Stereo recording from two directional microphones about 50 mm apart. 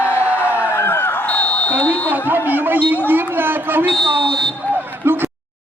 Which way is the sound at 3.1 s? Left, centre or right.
Right.